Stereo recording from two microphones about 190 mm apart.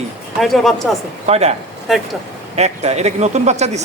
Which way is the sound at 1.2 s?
35° right (ahead or behind).